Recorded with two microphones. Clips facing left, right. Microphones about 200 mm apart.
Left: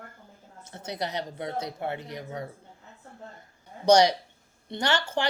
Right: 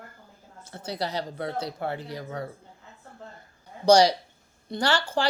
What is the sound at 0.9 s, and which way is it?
Speech, 20° left (ahead or behind).